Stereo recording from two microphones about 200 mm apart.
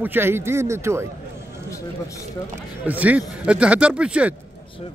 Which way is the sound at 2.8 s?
5° right (ahead or behind).